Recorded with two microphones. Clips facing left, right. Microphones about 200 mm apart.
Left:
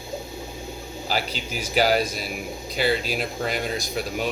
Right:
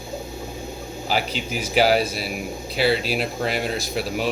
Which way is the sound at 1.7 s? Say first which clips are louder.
Right 2 dB; 5° right (ahead or behind).